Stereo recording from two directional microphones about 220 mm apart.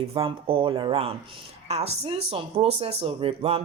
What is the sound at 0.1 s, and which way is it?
A woman's voice, 25° right (ahead or behind).